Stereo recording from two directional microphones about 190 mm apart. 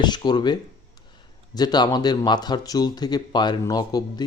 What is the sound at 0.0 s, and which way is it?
Speech, 25° left (ahead or behind).